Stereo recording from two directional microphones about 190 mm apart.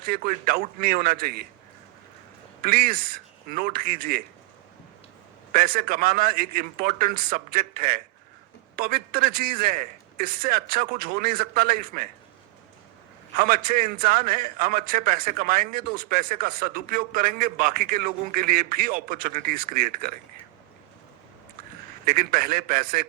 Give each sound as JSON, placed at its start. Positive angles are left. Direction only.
{"t": 0.1, "sound": "a man's voice", "side_deg": -50}
{"t": 2.6, "sound": "a man's voice", "side_deg": -50}
{"t": 5.5, "sound": "a man's voice", "side_deg": -50}
{"t": 13.3, "sound": "a man's voice", "side_deg": -50}
{"t": 22.0, "sound": "a man's voice", "side_deg": -50}